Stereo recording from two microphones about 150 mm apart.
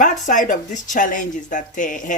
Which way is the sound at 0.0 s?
60° left (ahead or behind).